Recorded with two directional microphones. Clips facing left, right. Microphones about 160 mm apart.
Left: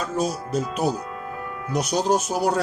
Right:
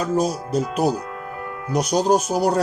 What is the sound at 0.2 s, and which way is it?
A man's voice, 40° right (ahead or behind).